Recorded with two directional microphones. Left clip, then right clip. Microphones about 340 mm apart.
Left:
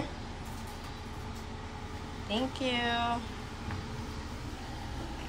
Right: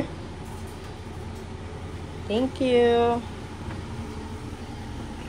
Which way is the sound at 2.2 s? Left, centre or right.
Centre.